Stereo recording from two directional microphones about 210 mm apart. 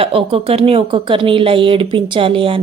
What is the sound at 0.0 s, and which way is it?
Speech, 25° right (ahead or behind).